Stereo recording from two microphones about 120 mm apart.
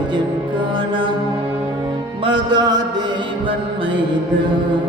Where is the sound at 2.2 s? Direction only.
40° right (ahead or behind).